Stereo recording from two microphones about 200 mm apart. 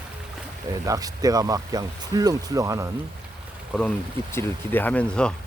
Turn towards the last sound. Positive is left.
turn(degrees=5)  # may be behind; listen again after turning